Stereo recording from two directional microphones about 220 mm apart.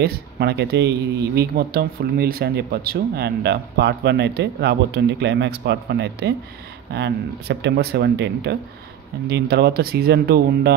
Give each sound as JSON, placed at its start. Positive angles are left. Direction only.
{"t": 0.0, "sound": "speech", "side_deg": -45}